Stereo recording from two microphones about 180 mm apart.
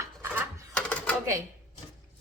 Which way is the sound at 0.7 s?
5° left (ahead or behind).